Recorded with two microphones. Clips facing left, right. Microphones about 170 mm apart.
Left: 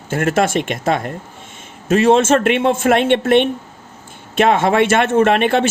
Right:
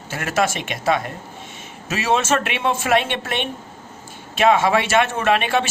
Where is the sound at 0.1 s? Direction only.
50° left (ahead or behind).